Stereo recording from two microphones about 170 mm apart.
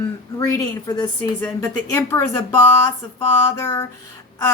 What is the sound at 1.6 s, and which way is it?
Speech, 10° left (ahead or behind).